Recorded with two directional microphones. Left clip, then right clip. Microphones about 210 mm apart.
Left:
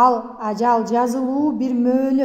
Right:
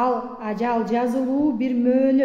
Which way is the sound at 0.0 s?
45° left (ahead or behind).